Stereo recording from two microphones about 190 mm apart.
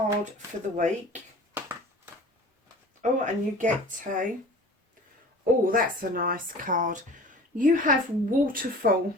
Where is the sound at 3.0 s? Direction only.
40° right (ahead or behind).